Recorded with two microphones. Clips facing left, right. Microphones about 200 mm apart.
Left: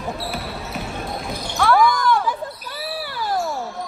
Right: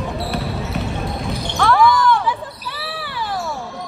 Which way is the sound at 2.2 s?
45° left (ahead or behind).